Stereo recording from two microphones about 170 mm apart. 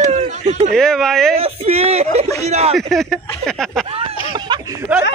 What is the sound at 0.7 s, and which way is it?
Speech, 5° left (ahead or behind).